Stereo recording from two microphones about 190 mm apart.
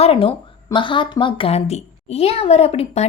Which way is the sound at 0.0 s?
30° left (ahead or behind).